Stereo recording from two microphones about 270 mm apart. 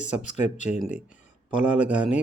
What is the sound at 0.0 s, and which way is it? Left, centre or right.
Speech, left.